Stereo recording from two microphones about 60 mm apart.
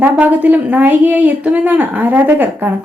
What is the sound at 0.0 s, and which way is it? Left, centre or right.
Speech, right.